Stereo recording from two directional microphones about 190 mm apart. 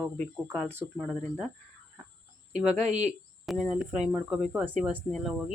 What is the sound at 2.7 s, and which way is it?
Speech, 35° right (ahead or behind).